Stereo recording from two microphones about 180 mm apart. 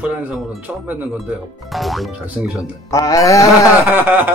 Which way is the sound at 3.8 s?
10° right (ahead or behind).